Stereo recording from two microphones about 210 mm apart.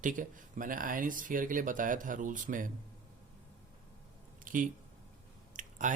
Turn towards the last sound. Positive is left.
turn(degrees=-35)  # may be behind; listen again after turning